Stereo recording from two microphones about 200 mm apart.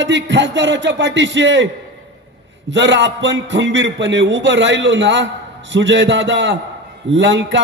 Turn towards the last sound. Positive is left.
turn(degrees=-65)  # may be behind; listen again after turning